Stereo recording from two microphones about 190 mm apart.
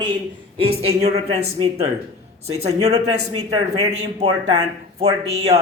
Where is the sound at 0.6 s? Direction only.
30° right (ahead or behind).